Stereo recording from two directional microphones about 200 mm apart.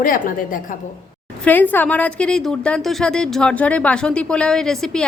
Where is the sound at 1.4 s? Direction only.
10° left (ahead or behind).